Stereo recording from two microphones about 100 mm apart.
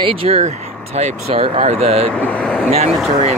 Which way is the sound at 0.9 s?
90° right.